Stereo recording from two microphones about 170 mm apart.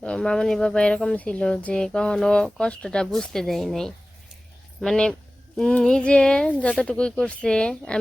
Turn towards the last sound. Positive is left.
turn(degrees=5)  # may be behind; listen again after turning